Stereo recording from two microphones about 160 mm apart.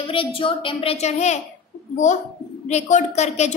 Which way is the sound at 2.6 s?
45° left (ahead or behind).